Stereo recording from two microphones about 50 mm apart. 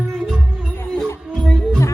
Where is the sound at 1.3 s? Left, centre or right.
Centre.